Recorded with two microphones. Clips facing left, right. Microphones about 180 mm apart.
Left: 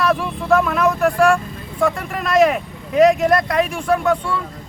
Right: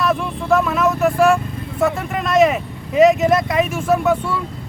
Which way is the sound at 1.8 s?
Centre (ahead or behind).